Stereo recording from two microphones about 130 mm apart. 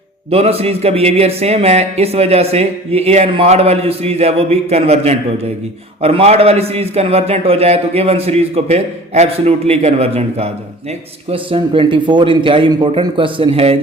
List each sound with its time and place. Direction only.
0.3 s a man's voice: 50° right (ahead or behind)